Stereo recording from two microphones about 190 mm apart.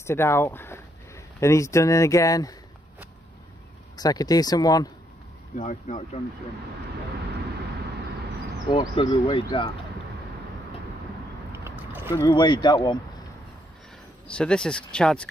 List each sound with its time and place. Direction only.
0.0 s speech: 15° left (ahead or behind)
3.9 s speech: 20° left (ahead or behind)
5.5 s speech: 40° left (ahead or behind)
8.6 s speech: 25° left (ahead or behind)
11.5 s vehicle: 10° right (ahead or behind)
12.3 s speech: 25° left (ahead or behind)
14.2 s speech: 5° left (ahead or behind)